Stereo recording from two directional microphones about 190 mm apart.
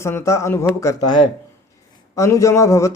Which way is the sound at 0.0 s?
15° left (ahead or behind).